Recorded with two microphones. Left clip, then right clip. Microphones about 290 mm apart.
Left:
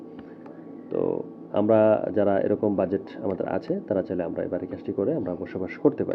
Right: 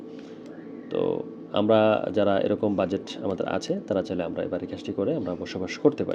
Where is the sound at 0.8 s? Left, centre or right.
Right.